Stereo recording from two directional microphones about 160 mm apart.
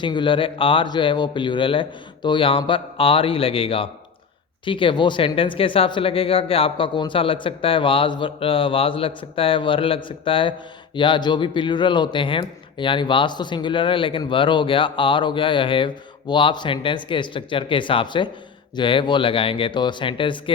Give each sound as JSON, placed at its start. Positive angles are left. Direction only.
{"t": 0.0, "sound": "speech", "side_deg": 30}